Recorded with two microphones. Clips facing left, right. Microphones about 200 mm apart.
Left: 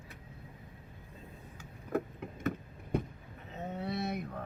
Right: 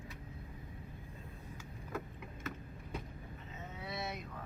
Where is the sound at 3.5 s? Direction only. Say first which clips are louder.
Left 8 dB; 60° left (ahead or behind).